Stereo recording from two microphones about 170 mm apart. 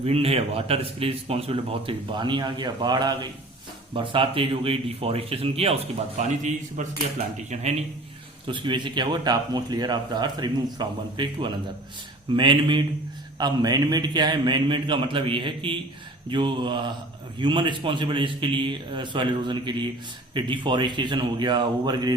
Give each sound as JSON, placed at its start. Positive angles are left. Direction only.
{"t": 0.0, "sound": "a man's voice", "side_deg": -35}
{"t": 8.4, "sound": "a man's voice", "side_deg": -30}